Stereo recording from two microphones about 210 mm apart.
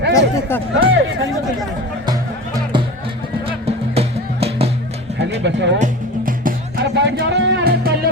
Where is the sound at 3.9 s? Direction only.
30° right (ahead or behind).